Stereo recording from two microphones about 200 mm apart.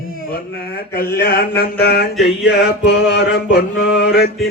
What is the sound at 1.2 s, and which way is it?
Mantra, 50° left (ahead or behind).